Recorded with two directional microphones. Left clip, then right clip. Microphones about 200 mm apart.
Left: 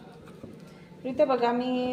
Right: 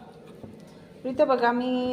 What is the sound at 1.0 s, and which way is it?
Speech, 15° right (ahead or behind).